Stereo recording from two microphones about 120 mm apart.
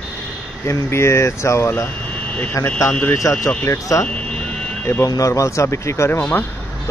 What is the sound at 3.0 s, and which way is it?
Speech, 25° left (ahead or behind).